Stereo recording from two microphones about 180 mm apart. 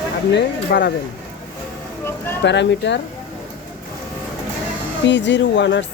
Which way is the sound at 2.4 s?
80° left.